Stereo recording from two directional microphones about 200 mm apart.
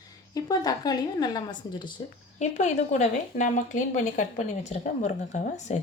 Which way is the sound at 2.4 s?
35° left (ahead or behind).